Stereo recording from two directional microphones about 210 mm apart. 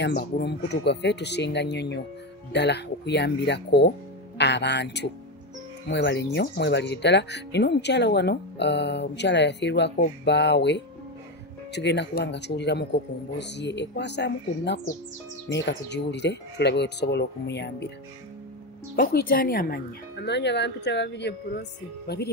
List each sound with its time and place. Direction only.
0.0 s speech: 50° left (ahead or behind)
18.9 s speech: 45° left (ahead or behind)